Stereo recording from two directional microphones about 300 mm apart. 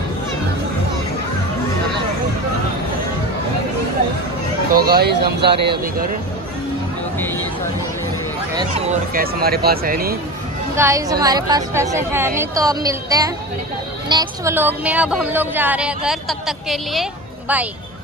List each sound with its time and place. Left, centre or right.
4.7 s speech: right
9.1 s speech: right
10.8 s a woman's voice: centre